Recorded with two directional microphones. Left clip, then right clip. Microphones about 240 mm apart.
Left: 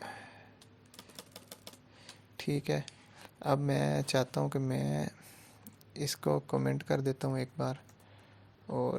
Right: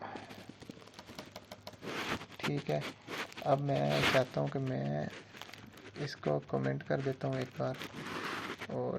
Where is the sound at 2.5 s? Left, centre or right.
Left.